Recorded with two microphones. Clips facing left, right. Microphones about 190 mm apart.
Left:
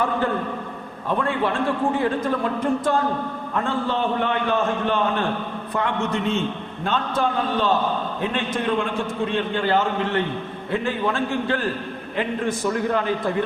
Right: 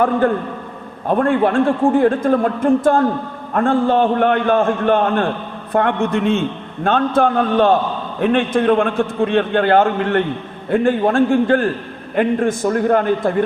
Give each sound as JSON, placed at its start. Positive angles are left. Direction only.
{"t": 1.0, "sound": "a man's voice", "side_deg": -50}